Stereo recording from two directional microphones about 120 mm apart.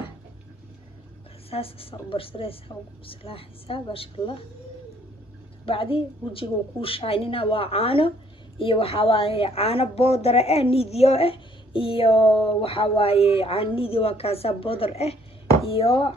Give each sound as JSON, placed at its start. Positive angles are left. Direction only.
{"t": 1.5, "sound": "a woman's voice", "side_deg": 50}
{"t": 5.7, "sound": "a woman's voice", "side_deg": 50}